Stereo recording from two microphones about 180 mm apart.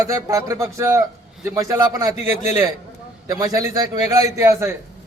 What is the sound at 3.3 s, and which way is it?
A man's voice, 20° right (ahead or behind).